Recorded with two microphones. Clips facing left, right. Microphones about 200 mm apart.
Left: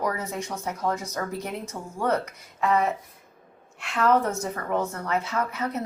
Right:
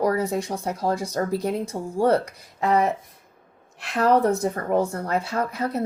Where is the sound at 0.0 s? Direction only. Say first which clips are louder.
Right 7 dB; 35° right (ahead or behind).